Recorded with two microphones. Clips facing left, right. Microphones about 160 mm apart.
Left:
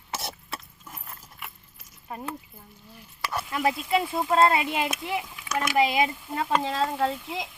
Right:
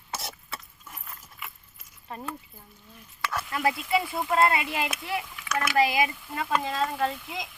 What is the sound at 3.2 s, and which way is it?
Sizzle, 20° left (ahead or behind).